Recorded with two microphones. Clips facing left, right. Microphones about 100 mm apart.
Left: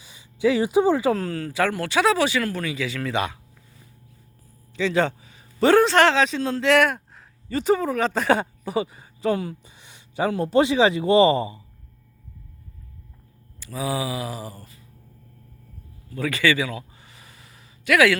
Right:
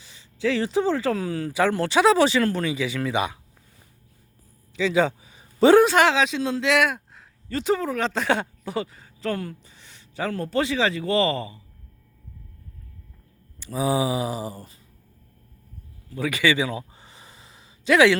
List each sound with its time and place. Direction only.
0.0 s speech: 10° left (ahead or behind)
1.2 s speech: 15° right (ahead or behind)
4.8 s a man's voice: 5° right (ahead or behind); by 11.6 s 20° left (ahead or behind)
13.6 s speech: 20° right (ahead or behind)
16.1 s a sound: 15° right (ahead or behind)